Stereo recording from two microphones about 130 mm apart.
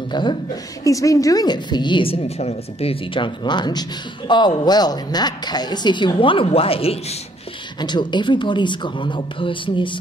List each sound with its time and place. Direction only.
0.1 s a woman's voice: 35° left (ahead or behind)
0.8 s a woman's voice: 25° left (ahead or behind); by 7.2 s 50° left (ahead or behind)
7.8 s a woman's voice: 35° left (ahead or behind)